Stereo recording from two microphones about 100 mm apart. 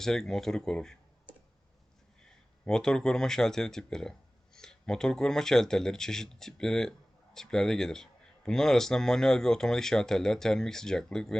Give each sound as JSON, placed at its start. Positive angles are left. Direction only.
{"t": 0.0, "sound": "speech", "side_deg": 5}
{"t": 2.6, "sound": "speech", "side_deg": 5}